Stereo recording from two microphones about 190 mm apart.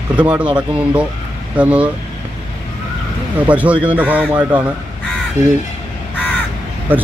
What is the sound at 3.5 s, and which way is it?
Speech, 5° right (ahead or behind).